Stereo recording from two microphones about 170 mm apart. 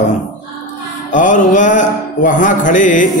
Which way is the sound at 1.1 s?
50° left (ahead or behind).